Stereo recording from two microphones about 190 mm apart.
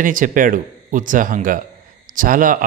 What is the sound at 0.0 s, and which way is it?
A man's voice, 45° right (ahead or behind).